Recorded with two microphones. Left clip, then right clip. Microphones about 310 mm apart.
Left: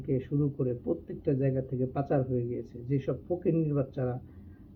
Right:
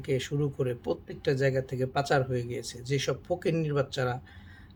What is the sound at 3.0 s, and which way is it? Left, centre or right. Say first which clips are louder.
Speech: even; right.